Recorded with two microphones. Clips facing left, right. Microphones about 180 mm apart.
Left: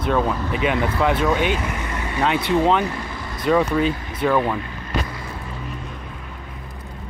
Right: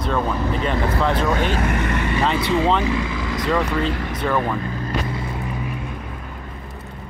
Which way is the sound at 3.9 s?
70° right (ahead or behind).